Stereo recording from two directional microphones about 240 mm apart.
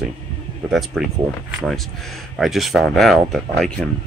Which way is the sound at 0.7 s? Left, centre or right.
Centre.